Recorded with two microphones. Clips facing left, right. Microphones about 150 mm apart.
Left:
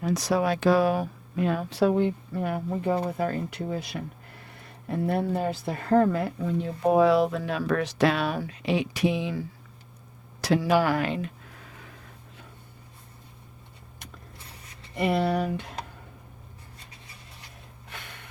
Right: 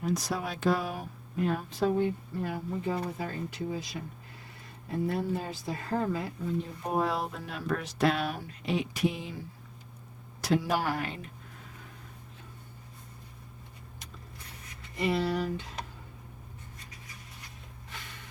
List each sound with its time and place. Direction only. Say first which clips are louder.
0.0 s a woman's voice: left 7 dB; 80° left
10.4 s speech: left 6 dB; 80° left
14.9 s speech: left 4 dB; 60° left (ahead or behind)
17.8 s snort: left 3 dB; 65° left (ahead or behind)